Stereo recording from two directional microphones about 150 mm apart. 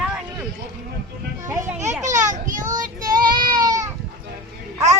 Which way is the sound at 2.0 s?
55° right (ahead or behind).